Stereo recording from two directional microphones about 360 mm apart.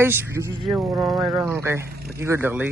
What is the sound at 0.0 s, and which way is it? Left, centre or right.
A man's voice, centre.